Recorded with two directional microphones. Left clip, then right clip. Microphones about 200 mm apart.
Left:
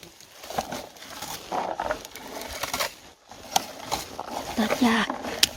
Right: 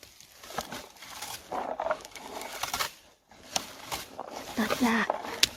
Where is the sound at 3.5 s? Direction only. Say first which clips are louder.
Left 8 dB; 15° left (ahead or behind).